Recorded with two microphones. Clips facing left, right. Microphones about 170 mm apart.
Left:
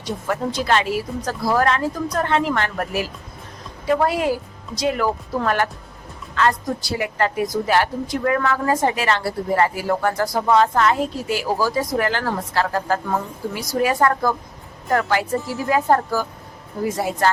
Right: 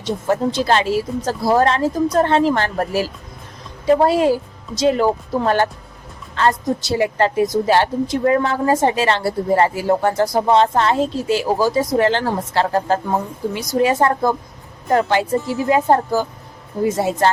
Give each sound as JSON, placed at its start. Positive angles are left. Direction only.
{"t": 0.0, "sound": "a woman's voice", "side_deg": -25}